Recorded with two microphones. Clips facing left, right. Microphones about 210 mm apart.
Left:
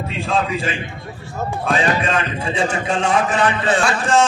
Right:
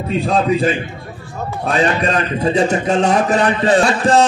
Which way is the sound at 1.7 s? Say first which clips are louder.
Right 3 dB; 40° right (ahead or behind).